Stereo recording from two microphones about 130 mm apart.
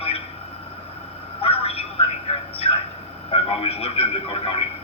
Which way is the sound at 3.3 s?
45° left (ahead or behind).